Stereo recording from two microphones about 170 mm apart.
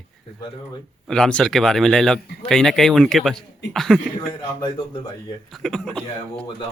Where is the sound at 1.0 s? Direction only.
5° left (ahead or behind).